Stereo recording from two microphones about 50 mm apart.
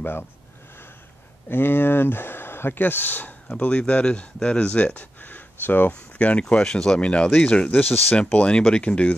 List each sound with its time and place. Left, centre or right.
1.5 s speech: left
3.4 s speech: left
5.9 s speech: left
7.8 s speech: left
8.5 s speech: left